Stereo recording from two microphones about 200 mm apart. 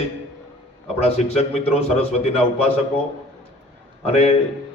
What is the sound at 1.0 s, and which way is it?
A man's voice, 30° left (ahead or behind).